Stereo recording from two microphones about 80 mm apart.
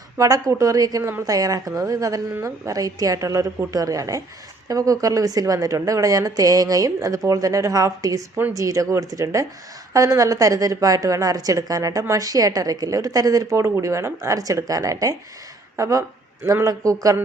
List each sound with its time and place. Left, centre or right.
0.2 s a woman's voice: right